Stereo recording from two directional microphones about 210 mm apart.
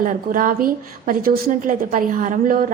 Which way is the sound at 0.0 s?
40° right (ahead or behind).